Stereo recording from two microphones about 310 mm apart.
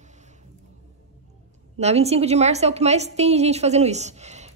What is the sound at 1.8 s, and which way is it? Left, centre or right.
A woman's voice, centre.